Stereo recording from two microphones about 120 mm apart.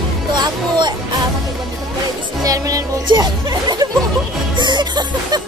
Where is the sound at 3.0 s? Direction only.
35° right (ahead or behind).